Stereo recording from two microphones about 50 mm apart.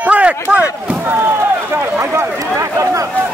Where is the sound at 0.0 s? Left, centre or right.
Right.